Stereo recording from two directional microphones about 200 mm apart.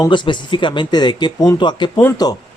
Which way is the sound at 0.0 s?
25° left (ahead or behind).